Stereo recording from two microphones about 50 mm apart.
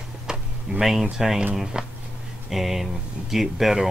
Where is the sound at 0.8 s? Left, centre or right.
Centre.